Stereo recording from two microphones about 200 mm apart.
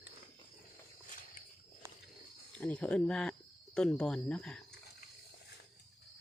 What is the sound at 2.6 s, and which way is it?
Speech, 5° left (ahead or behind).